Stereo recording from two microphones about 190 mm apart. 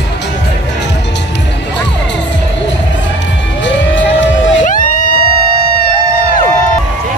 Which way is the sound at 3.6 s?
75° left (ahead or behind).